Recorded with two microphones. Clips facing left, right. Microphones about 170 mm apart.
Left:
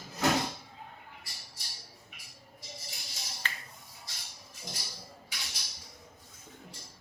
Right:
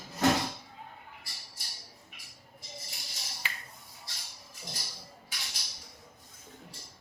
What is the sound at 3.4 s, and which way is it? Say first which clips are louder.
Finger snapping: left 1 dB; 10° right (ahead or behind).